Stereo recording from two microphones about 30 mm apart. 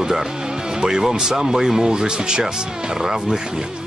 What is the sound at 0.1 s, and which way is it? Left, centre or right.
Music, centre.